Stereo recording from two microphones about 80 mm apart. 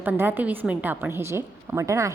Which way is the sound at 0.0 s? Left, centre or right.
Right.